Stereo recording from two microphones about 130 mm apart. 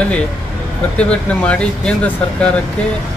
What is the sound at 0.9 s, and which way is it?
Speech, 10° left (ahead or behind).